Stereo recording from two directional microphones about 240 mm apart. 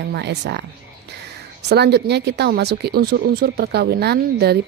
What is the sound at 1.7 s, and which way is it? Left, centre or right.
Speech, right.